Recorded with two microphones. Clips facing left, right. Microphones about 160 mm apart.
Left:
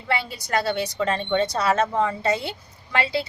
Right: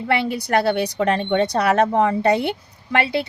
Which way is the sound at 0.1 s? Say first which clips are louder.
Right 5 dB; 60° right (ahead or behind).